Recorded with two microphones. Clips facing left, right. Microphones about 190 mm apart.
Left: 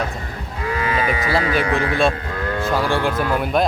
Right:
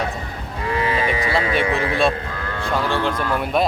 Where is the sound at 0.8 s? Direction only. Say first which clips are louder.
Even; 30° right (ahead or behind).